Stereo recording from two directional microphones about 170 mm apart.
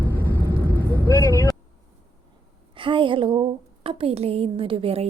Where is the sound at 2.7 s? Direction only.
30° right (ahead or behind).